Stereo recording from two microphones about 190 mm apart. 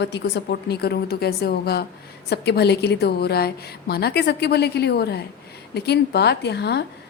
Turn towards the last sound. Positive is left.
turn(degrees=60)  # may be behind; listen again after turning